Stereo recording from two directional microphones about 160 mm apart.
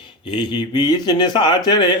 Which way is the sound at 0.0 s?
30° left (ahead or behind).